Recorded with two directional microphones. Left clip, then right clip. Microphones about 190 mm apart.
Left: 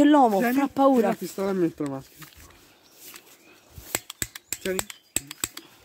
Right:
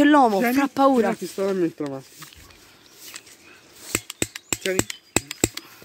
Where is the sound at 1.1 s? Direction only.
50° left (ahead or behind).